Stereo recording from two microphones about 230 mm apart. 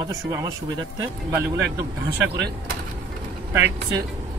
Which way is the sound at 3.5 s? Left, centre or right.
Centre.